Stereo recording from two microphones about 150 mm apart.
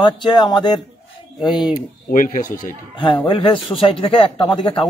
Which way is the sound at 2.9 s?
35° left (ahead or behind).